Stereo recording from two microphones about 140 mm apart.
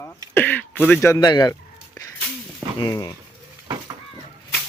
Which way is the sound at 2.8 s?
25° left (ahead or behind).